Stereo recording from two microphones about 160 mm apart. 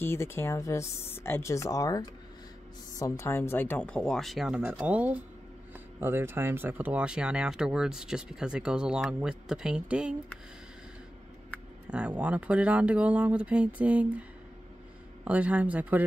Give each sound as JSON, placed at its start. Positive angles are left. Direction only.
{"t": 0.0, "sound": "speech", "side_deg": 15}
{"t": 11.9, "sound": "speech", "side_deg": -5}
{"t": 15.2, "sound": "speech", "side_deg": -10}